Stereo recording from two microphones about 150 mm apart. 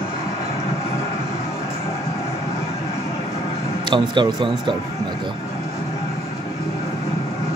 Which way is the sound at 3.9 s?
30° right (ahead or behind).